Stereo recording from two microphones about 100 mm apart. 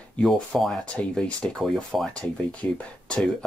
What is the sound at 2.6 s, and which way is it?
Speech, 20° left (ahead or behind).